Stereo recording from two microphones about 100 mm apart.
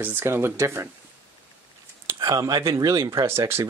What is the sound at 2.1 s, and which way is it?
Speech, 35° right (ahead or behind).